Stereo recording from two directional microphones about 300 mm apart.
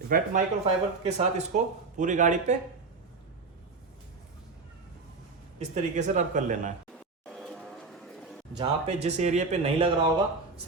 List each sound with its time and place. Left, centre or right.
0.1 s speech: right
5.5 s speech: right
7.3 s a sound: centre
8.5 s speech: right